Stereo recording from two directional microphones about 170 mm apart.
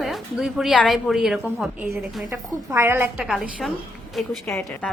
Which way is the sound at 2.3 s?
15° right (ahead or behind).